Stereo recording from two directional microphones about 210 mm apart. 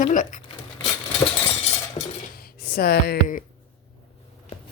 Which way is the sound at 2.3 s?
45° left (ahead or behind).